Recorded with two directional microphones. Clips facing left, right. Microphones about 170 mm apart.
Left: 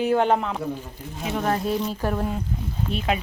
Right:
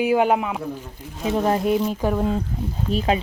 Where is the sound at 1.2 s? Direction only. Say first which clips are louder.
Right 4 dB; 30° right (ahead or behind); by 2.3 s 10° right (ahead or behind).